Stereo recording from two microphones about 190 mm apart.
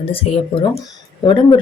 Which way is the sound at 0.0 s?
30° left (ahead or behind).